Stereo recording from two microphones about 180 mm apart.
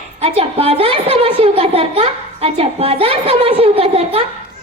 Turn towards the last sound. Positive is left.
turn(degrees=-35)  # may be behind; listen again after turning